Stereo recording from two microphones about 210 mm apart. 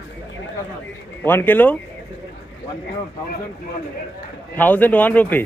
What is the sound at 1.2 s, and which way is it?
Speech, 10° left (ahead or behind).